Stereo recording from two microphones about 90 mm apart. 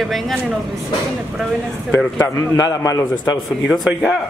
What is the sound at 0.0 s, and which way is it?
Speech, centre (ahead or behind).